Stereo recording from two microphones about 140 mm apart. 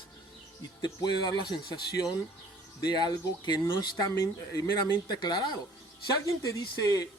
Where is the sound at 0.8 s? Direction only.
30° left (ahead or behind).